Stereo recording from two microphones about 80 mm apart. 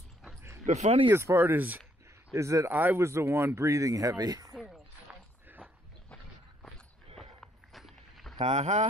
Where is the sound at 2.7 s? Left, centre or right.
Right.